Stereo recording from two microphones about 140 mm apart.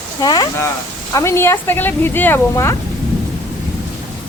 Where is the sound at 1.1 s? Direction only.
20° left (ahead or behind).